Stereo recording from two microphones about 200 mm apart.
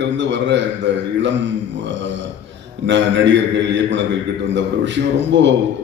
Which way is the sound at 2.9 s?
60° right (ahead or behind).